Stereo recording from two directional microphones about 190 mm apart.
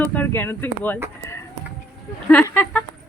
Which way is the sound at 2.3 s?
10° left (ahead or behind).